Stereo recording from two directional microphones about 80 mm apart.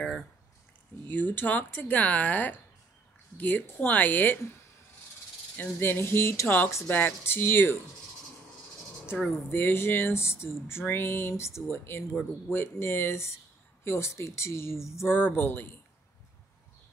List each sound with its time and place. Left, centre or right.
1.1 s speech: left
5.6 s speech: left
9.5 s a sound: left
15.0 s speech: left